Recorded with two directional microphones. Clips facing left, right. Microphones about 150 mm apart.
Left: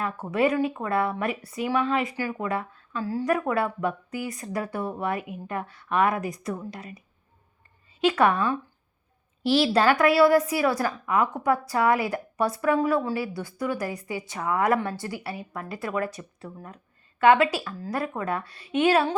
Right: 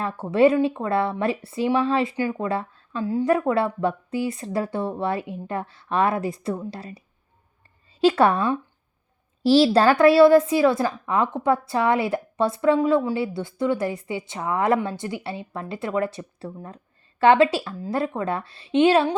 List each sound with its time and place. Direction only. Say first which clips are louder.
0.0 s speech: right 6 dB; 30° right (ahead or behind)
8.0 s a woman's voice: right 3 dB; 30° right (ahead or behind)